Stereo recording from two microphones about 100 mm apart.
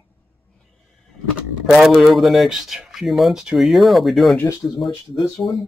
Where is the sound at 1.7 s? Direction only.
Centre (ahead or behind).